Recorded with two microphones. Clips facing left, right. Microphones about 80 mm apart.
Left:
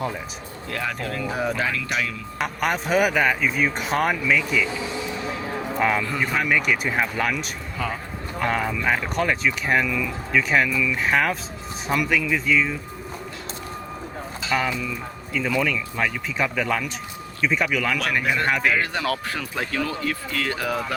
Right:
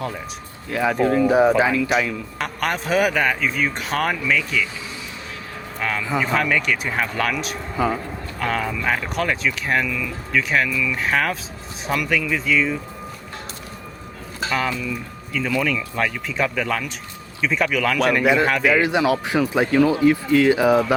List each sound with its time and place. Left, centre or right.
0.7 s speech: centre
2.4 s speech: centre
5.7 s speech: centre
6.1 s speech: centre
14.4 s a sound: right
15.3 s speech: centre
18.9 s speech: centre